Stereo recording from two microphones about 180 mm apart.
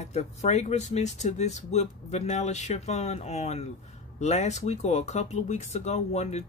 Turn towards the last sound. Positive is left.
turn(degrees=35)  # may be behind; listen again after turning